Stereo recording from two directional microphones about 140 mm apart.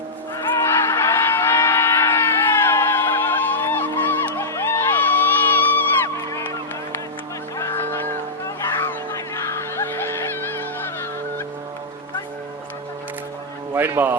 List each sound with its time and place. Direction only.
0.3 s a sound: 20° left (ahead or behind)
4.9 s crowd: 15° left (ahead or behind)
7.6 s music: 15° left (ahead or behind)
8.4 s snicker: 20° left (ahead or behind)
13.7 s speech: 15° right (ahead or behind)